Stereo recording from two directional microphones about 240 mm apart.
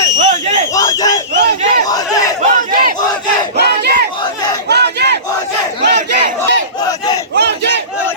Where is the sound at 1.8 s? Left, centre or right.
Centre.